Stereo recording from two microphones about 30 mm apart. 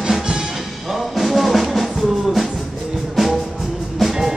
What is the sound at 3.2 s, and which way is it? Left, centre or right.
Music, centre.